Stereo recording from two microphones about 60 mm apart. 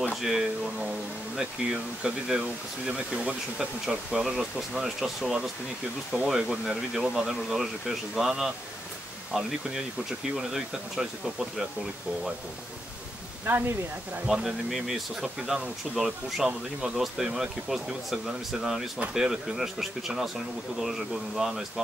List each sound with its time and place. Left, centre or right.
0.1 s speech: centre
13.5 s speech: right
14.2 s speech: centre